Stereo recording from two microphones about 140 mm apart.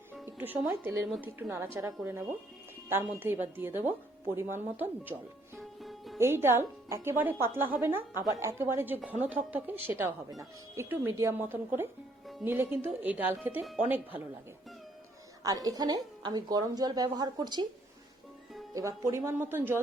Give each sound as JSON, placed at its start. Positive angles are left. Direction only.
{"t": 0.3, "sound": "a woman's voice", "side_deg": -15}
{"t": 2.9, "sound": "a woman's voice", "side_deg": -15}
{"t": 5.5, "sound": "music", "side_deg": 0}
{"t": 6.1, "sound": "a woman's voice", "side_deg": -15}
{"t": 15.4, "sound": "a woman's voice", "side_deg": -25}
{"t": 18.7, "sound": "a woman's voice", "side_deg": -25}